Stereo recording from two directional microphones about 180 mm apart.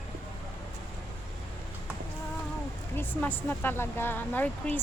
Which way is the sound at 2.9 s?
10° left (ahead or behind).